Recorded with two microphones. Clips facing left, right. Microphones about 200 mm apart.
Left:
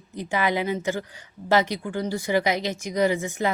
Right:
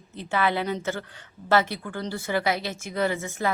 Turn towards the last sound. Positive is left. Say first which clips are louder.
# left 3 dB
turn(degrees=15)  # may be behind; listen again after turning